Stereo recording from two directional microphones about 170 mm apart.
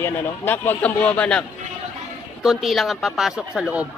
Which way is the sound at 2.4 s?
Centre (ahead or behind).